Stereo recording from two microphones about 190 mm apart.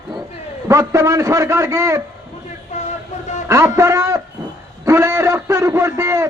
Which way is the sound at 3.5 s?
15° right (ahead or behind).